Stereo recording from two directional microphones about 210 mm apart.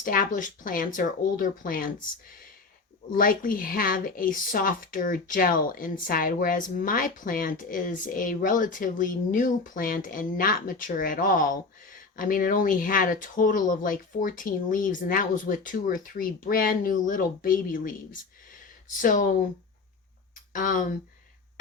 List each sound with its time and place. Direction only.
0.0 s speech: 40° left (ahead or behind)
3.2 s speech: 40° left (ahead or behind)
20.5 s speech: 40° left (ahead or behind)